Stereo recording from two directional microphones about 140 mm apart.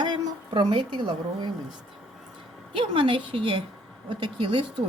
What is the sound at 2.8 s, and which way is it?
Speech, 40° right (ahead or behind).